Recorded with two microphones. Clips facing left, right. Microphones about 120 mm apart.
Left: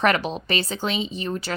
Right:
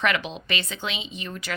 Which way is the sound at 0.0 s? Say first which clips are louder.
Left 5 dB; 40° left (ahead or behind).